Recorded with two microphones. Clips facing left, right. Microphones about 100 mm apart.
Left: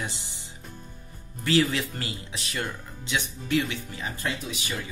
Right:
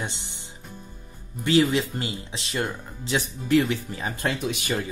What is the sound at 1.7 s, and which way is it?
Speech, 20° right (ahead or behind).